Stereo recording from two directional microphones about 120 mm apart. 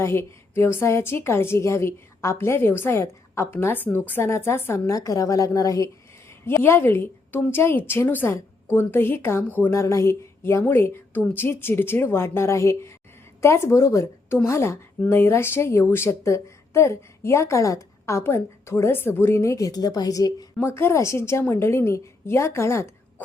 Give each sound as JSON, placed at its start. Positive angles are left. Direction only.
{"t": 0.0, "sound": "a woman's voice", "side_deg": 20}